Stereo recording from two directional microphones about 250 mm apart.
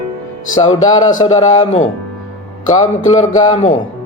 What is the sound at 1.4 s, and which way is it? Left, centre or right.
Speech, left.